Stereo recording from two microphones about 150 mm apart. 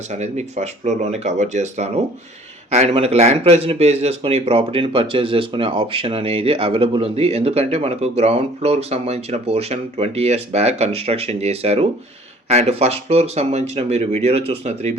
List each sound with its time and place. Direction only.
0.1 s speech: 50° right (ahead or behind)